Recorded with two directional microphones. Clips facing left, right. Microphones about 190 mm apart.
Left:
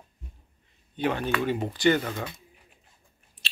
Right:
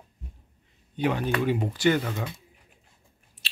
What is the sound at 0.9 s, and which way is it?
Speech, 10° right (ahead or behind).